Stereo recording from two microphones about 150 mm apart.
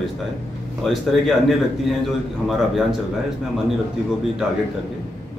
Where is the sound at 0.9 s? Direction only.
Centre (ahead or behind).